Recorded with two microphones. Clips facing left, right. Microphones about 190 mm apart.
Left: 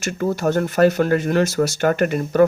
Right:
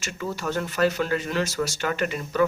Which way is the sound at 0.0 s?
50° left (ahead or behind).